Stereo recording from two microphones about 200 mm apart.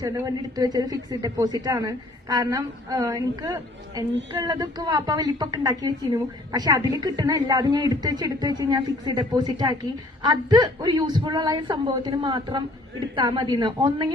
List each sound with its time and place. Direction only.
0.0 s speech: 15° right (ahead or behind)